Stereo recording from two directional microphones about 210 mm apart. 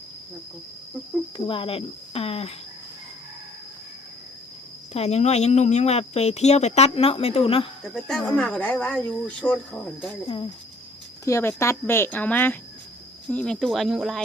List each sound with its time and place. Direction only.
1.5 s speech: 25° left (ahead or behind)
4.9 s speech: 30° left (ahead or behind)
7.9 s speech: centre (ahead or behind)
10.2 s speech: 25° left (ahead or behind)
11.3 s speech: 15° left (ahead or behind)